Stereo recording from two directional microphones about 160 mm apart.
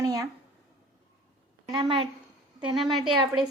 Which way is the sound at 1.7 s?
30° right (ahead or behind).